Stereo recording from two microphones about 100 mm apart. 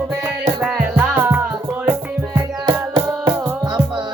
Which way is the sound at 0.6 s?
15° right (ahead or behind).